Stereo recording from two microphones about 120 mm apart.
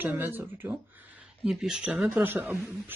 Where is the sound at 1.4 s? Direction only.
5° right (ahead or behind).